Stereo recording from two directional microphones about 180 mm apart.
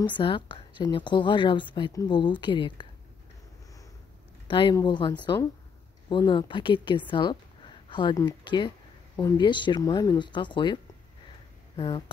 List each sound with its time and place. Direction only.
0.0 s a woman's voice: 25° left (ahead or behind)
4.5 s a woman's voice: 25° left (ahead or behind)